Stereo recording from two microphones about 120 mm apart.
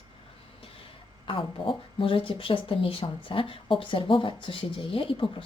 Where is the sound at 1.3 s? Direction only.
45° left (ahead or behind).